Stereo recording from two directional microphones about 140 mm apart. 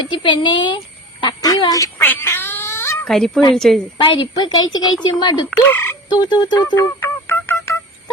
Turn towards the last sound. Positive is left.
turn(degrees=20)  # may be behind; listen again after turning